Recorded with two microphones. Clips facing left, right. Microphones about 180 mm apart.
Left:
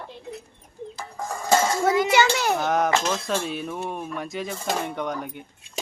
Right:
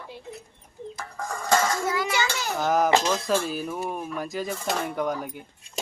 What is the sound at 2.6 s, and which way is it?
Speech, centre (ahead or behind).